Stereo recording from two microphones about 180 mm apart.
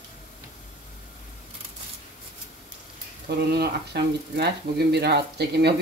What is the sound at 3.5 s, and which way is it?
Speech, 60° right (ahead or behind).